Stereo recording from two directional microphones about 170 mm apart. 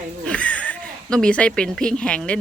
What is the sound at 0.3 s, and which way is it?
A woman's voice, 5° left (ahead or behind).